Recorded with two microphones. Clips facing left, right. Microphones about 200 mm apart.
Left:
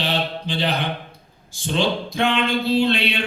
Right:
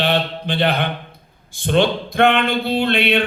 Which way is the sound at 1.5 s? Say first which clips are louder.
Right 5 dB; 60° right (ahead or behind).